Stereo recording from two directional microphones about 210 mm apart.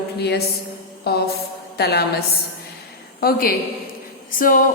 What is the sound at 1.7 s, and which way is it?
A woman's voice, 50° left (ahead or behind).